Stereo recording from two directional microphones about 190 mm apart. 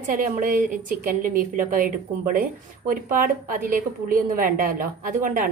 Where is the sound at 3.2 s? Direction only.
50° right (ahead or behind).